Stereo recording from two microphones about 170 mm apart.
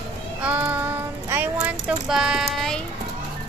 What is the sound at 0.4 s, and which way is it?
Child singing, 10° right (ahead or behind).